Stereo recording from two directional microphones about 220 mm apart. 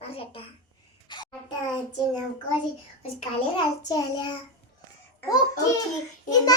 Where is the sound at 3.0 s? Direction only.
25° left (ahead or behind).